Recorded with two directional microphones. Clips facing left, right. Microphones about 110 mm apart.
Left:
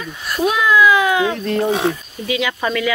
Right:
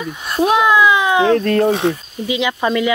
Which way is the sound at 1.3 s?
60° right (ahead or behind).